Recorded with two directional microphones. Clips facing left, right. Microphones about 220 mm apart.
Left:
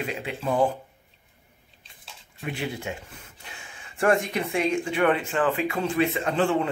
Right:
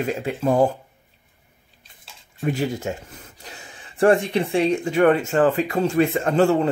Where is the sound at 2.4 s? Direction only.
40° right (ahead or behind).